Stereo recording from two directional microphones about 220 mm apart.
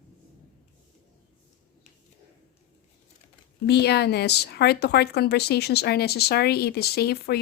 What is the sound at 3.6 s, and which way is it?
A woman's voice, 50° left (ahead or behind).